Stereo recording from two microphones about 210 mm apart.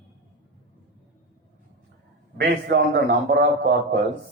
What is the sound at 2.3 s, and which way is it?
A man's voice, 50° right (ahead or behind).